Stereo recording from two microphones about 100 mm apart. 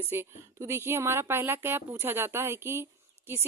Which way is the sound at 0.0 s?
25° right (ahead or behind).